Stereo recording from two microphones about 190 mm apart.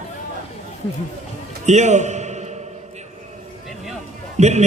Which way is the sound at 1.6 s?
40° right (ahead or behind).